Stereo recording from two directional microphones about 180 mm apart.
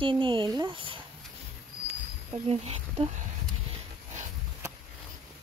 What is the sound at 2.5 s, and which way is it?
Speech, 35° right (ahead or behind).